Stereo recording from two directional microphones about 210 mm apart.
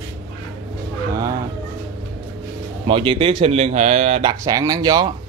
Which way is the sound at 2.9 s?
25° right (ahead or behind).